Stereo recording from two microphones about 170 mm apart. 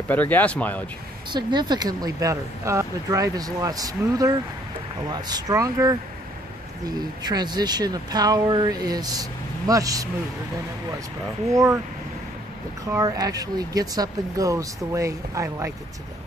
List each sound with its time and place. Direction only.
0.1 s speech: 10° left (ahead or behind)
1.3 s speech: 25° right (ahead or behind)
11.5 s speech: 15° right (ahead or behind)
12.9 s speech: 20° right (ahead or behind)